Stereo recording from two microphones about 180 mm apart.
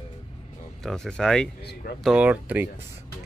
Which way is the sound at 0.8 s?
Centre (ahead or behind).